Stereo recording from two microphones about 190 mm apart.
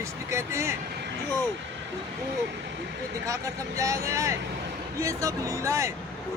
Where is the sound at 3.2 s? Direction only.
15° right (ahead or behind).